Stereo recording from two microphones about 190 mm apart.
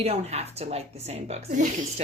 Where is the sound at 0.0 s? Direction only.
35° right (ahead or behind).